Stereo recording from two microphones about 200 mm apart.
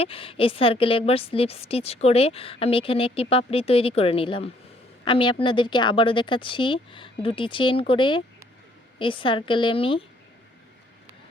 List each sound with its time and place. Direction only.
0.0 s a woman's voice: 30° left (ahead or behind)